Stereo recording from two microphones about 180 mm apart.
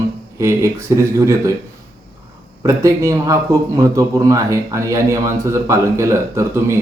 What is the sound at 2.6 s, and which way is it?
A man's voice, 15° right (ahead or behind).